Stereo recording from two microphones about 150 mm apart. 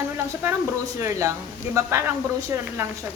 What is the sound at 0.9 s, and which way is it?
A woman's voice, 20° right (ahead or behind).